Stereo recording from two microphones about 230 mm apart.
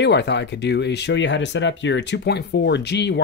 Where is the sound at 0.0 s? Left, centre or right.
Left.